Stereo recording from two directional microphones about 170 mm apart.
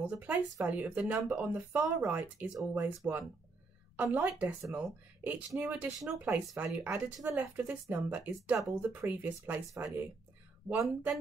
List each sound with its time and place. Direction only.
0.6 s speech: 10° right (ahead or behind)
3.9 s speech: 10° right (ahead or behind)